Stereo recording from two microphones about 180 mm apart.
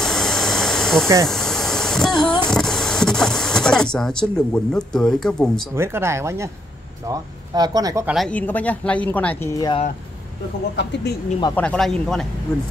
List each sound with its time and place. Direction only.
0.0 s a sound: 5° left (ahead or behind)
2.2 s speech: 25° left (ahead or behind)
2.5 s speech: centre (ahead or behind)
5.8 s speech: 15° right (ahead or behind)
8.1 s speech: 5° left (ahead or behind)
9.6 s speech: 25° left (ahead or behind)
10.8 s speech: 70° left (ahead or behind)
11.5 s speech: 5° left (ahead or behind)